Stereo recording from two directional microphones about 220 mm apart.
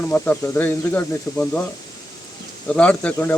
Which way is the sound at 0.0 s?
10° left (ahead or behind).